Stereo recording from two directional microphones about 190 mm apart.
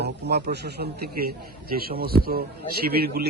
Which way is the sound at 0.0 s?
60° right (ahead or behind).